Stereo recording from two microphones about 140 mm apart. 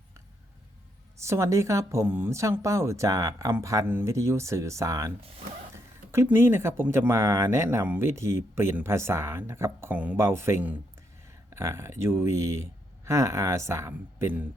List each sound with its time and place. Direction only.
1.2 s speech: 20° right (ahead or behind)